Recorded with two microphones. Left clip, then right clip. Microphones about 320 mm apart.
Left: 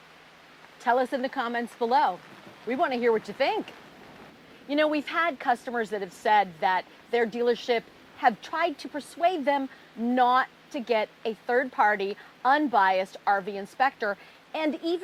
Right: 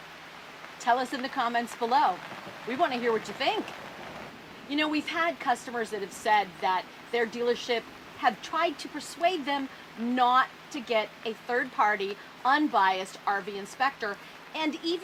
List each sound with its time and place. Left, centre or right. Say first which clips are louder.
0.9 s speech: left 2 dB; left
4.7 s a woman's voice: left 4 dB; left